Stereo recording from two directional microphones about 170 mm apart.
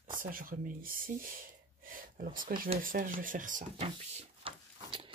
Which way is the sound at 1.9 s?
55° right (ahead or behind).